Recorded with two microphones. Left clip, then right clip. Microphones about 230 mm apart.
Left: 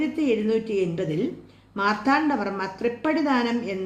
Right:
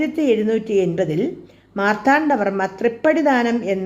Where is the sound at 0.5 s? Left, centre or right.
Right.